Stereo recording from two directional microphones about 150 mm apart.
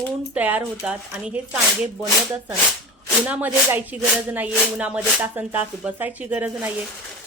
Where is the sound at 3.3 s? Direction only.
10° right (ahead or behind).